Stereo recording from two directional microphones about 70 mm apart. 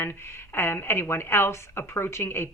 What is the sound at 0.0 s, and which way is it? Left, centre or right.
A woman's voice, left.